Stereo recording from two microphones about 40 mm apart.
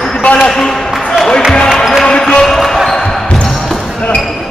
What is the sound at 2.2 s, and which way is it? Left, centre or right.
Basketball bounce, centre.